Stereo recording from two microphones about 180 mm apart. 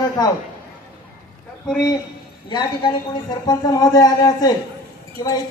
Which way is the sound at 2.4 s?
25° left (ahead or behind).